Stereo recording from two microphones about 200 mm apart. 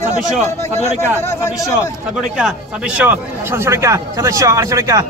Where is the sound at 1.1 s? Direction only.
15° left (ahead or behind).